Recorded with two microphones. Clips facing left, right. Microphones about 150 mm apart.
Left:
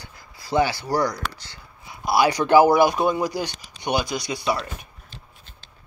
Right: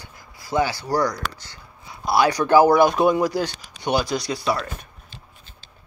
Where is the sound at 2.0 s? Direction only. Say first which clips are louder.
Right 1 dB; 5° left (ahead or behind).